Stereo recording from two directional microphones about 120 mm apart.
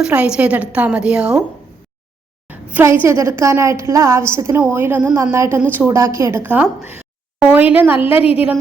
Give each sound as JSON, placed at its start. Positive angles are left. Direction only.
{"t": 0.0, "sound": "a woman's voice", "side_deg": -10}
{"t": 3.0, "sound": "a woman's voice", "side_deg": -25}